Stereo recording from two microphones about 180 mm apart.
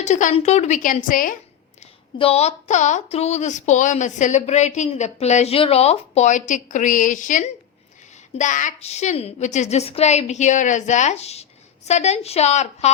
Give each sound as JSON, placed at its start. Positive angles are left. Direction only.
{"t": 0.0, "sound": "a woman's voice", "side_deg": 45}
{"t": 1.8, "sound": "speech", "side_deg": 35}